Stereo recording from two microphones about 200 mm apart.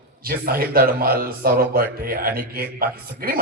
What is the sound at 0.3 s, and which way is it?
Speech, 50° right (ahead or behind).